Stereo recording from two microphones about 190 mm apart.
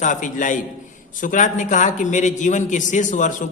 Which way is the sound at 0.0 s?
40° left (ahead or behind).